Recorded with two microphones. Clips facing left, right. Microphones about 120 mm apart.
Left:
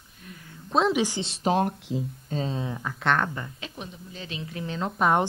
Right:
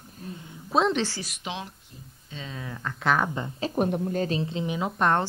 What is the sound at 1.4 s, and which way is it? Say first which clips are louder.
Speech: left 14 dB; 45° left (ahead or behind).